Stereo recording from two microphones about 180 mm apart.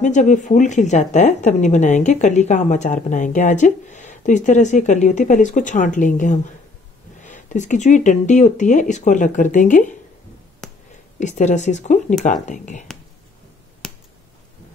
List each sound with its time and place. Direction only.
0.0 s a woman's voice: 45° left (ahead or behind)
11.1 s a woman's voice: 40° left (ahead or behind)